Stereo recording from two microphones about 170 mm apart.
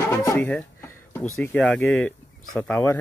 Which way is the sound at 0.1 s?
20° left (ahead or behind).